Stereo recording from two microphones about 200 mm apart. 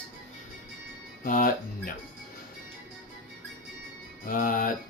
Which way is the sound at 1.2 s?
45° left (ahead or behind).